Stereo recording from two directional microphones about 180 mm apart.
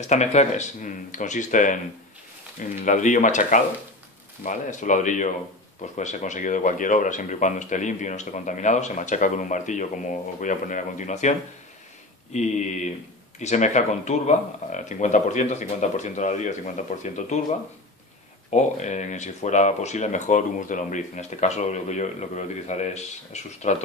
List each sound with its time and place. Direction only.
0.0 s speech: 40° left (ahead or behind)